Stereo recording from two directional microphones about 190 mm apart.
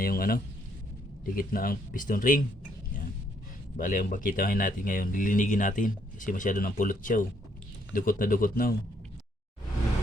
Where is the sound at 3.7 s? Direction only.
50° left (ahead or behind).